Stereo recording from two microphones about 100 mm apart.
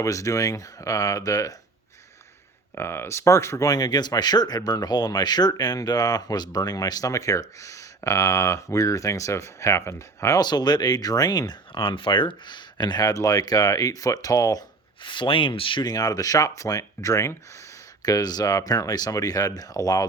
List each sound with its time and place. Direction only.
0.0 s speech: 35° left (ahead or behind)
2.7 s speech: 25° left (ahead or behind)
10.4 s speech: 45° left (ahead or behind)
15.0 s speech: 55° left (ahead or behind)
15.8 s speech: 40° left (ahead or behind)